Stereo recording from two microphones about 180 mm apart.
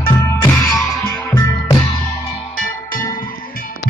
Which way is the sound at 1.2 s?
15° left (ahead or behind).